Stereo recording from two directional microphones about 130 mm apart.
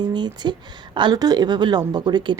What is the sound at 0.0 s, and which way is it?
Speech, 35° right (ahead or behind).